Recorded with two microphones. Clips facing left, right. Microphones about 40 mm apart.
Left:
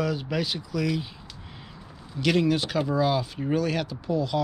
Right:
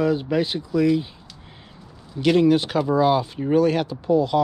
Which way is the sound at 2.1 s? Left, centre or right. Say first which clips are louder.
Right 6 dB; centre.